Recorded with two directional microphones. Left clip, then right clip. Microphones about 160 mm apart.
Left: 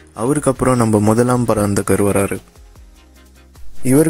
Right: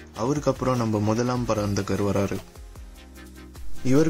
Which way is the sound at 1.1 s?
50° left (ahead or behind).